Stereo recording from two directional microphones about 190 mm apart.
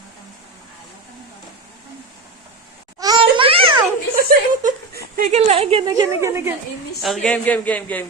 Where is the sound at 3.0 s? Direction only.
25° right (ahead or behind).